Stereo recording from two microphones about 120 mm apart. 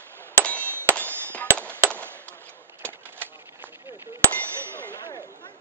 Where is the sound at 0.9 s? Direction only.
10° left (ahead or behind).